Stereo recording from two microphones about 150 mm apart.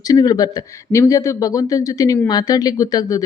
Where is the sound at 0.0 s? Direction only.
25° left (ahead or behind).